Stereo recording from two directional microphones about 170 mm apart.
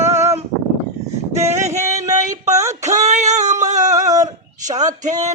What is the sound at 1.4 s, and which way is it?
Male singing, 40° right (ahead or behind).